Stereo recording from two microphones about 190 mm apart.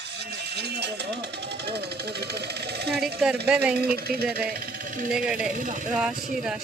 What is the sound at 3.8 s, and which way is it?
Speech, 55° right (ahead or behind).